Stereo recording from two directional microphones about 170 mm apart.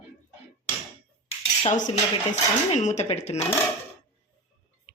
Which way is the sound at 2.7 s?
45° left (ahead or behind).